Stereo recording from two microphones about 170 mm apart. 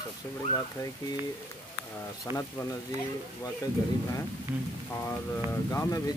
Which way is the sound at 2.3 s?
20° right (ahead or behind).